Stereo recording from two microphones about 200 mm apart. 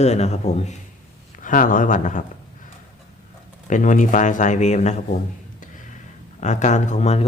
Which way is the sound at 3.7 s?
40° left (ahead or behind).